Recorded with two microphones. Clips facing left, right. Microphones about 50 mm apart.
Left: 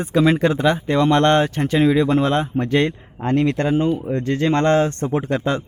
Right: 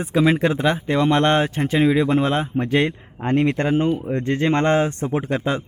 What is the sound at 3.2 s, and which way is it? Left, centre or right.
Speech, right.